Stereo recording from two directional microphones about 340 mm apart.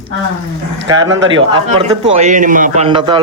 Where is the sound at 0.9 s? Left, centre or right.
Centre.